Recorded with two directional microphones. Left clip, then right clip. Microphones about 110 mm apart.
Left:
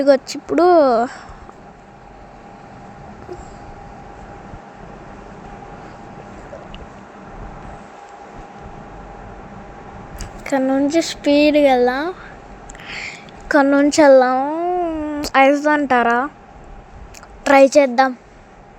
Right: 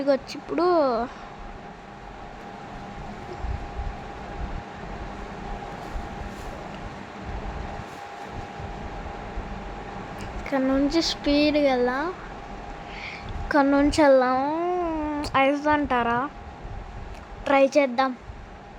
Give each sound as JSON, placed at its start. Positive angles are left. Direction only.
{"t": 0.0, "sound": "a woman's voice", "side_deg": 40}
{"t": 10.2, "sound": "a woman's voice", "side_deg": 35}
{"t": 12.9, "sound": "a sound", "side_deg": 40}
{"t": 13.7, "sound": "a woman's voice", "side_deg": 25}
{"t": 14.4, "sound": "cat", "side_deg": 15}
{"t": 15.2, "sound": "a woman's voice", "side_deg": 40}
{"t": 17.4, "sound": "a woman's voice", "side_deg": 50}